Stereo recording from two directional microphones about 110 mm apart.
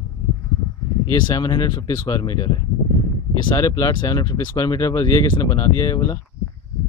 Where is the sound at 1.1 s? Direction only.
35° left (ahead or behind).